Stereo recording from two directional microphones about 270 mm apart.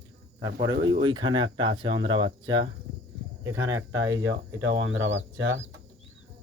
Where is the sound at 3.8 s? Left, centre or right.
Right.